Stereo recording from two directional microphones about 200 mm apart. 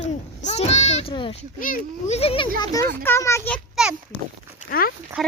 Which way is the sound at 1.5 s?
40° left (ahead or behind).